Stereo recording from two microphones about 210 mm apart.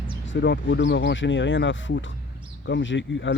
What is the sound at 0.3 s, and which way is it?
Speech, 55° left (ahead or behind).